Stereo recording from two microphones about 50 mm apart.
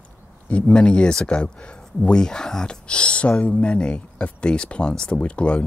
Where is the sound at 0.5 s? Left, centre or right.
Left.